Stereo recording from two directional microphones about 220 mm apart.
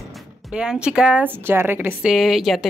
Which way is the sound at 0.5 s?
5° right (ahead or behind).